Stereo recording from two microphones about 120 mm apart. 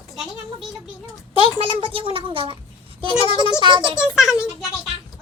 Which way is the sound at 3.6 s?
40° right (ahead or behind).